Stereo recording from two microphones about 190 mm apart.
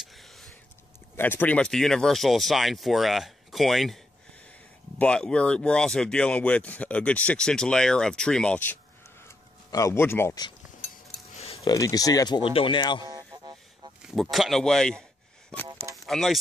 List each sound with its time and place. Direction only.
0.0 s a sound: centre (ahead or behind)
1.1 s speech: 10° left (ahead or behind)
11.6 s speech: 20° left (ahead or behind)
13.0 s music: 20° right (ahead or behind)
14.0 s speech: centre (ahead or behind)
16.1 s speech: centre (ahead or behind)